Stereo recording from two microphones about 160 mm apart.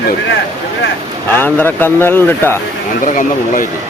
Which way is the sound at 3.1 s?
55° left (ahead or behind).